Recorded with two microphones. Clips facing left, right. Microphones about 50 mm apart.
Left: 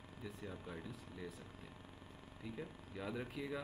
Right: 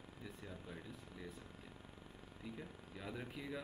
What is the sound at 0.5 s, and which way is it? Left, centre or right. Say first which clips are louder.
Speech: left 3 dB; centre.